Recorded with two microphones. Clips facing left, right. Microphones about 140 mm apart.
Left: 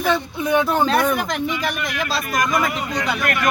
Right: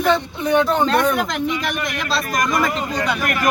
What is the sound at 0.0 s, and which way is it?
Speech, 10° left (ahead or behind).